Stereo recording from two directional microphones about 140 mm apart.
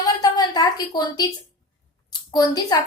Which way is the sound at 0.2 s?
30° left (ahead or behind).